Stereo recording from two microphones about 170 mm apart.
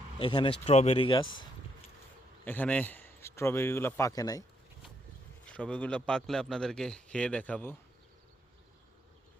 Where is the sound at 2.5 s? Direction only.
10° left (ahead or behind).